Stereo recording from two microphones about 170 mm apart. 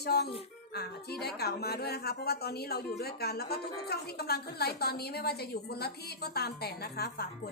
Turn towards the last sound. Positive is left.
turn(degrees=70)  # may be behind; listen again after turning